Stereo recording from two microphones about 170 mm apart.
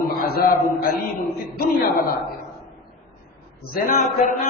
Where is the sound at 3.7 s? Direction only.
50° left (ahead or behind).